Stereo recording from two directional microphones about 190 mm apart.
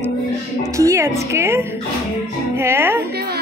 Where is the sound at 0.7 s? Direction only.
15° right (ahead or behind).